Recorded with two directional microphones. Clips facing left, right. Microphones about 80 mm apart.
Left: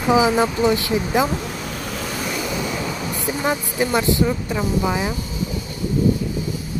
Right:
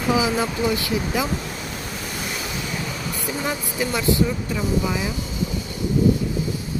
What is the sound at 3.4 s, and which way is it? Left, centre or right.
Speech, left.